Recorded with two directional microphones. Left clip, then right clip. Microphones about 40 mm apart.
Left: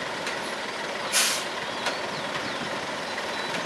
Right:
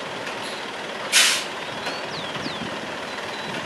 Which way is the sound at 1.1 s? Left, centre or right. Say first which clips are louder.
Right 7 dB; right.